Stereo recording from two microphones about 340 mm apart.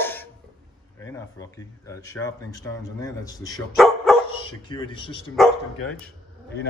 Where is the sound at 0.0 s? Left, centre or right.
Centre.